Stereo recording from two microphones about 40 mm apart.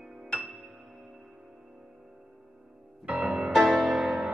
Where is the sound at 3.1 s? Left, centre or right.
Right.